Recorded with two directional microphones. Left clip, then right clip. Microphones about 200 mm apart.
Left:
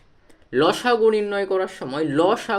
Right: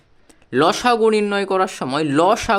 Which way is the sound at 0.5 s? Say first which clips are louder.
Right 3 dB; 45° right (ahead or behind).